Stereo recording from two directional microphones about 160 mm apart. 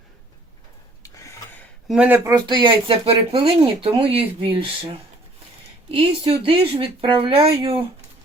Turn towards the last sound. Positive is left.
turn(degrees=-30)  # may be behind; listen again after turning